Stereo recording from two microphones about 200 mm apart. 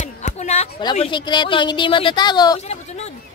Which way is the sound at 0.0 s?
35° left (ahead or behind).